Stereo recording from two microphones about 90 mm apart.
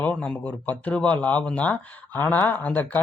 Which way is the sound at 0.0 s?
15° left (ahead or behind).